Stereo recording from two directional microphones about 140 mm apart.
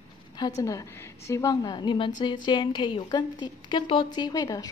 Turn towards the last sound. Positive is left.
turn(degrees=25)  # may be behind; listen again after turning